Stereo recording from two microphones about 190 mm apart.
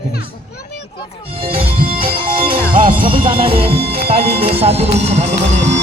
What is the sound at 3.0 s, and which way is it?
Music, 30° right (ahead or behind).